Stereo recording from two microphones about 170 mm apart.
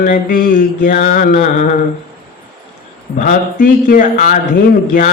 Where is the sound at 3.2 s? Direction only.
55° left (ahead or behind).